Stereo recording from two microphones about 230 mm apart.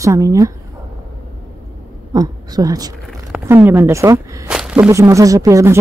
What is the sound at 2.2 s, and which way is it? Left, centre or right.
Speech, centre.